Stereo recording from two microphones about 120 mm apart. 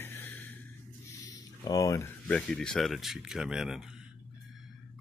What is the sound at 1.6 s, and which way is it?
Speech, 30° left (ahead or behind).